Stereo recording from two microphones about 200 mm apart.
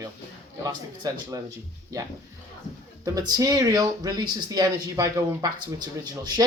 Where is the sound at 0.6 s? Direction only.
15° right (ahead or behind).